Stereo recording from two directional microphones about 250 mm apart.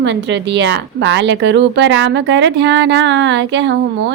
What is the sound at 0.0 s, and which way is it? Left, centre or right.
Speech, right.